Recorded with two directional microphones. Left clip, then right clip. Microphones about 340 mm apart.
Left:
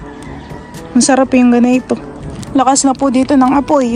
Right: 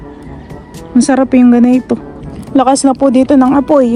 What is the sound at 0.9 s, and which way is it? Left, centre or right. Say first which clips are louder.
Speech: right 1 dB; centre.